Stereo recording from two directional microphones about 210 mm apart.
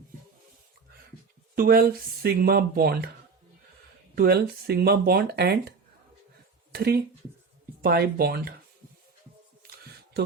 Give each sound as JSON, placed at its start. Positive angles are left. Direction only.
{"t": 1.5, "sound": "speech", "side_deg": -45}
{"t": 4.1, "sound": "speech", "side_deg": -45}
{"t": 6.7, "sound": "speech", "side_deg": -45}
{"t": 10.2, "sound": "speech", "side_deg": -50}